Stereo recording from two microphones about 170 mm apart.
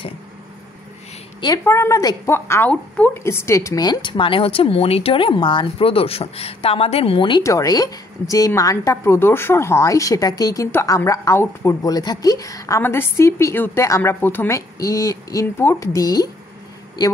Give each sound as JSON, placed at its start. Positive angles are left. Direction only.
{"t": 1.6, "sound": "a woman's voice", "side_deg": 15}